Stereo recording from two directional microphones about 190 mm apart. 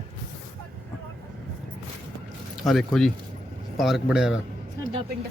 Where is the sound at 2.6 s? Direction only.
Centre (ahead or behind).